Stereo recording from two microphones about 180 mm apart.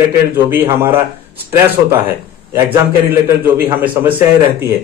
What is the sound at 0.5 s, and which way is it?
Speech, 10° right (ahead or behind).